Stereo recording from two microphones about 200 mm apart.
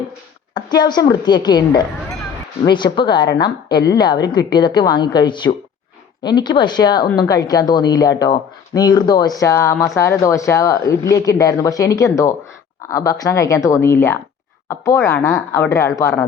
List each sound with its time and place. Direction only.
0.5 s a woman's voice: 20° left (ahead or behind)